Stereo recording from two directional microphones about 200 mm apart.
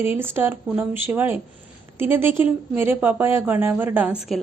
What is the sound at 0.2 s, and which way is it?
Speech, 10° right (ahead or behind).